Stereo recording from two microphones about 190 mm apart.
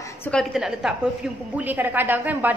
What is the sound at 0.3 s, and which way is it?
A woman's voice, centre (ahead or behind).